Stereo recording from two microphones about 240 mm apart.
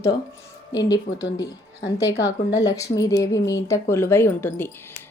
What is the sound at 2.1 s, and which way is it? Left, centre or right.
Speech, left.